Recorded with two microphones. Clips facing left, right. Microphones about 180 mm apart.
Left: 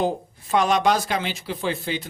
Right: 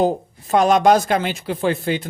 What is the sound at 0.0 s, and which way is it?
Speech, 45° right (ahead or behind).